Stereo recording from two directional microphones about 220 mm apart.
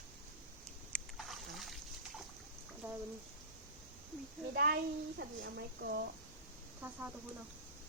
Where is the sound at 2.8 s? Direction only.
10° right (ahead or behind).